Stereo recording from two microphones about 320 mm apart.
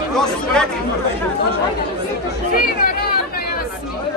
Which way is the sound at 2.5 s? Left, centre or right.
Left.